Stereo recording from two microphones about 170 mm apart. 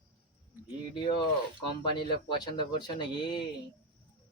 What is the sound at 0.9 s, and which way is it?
Speech, 30° left (ahead or behind).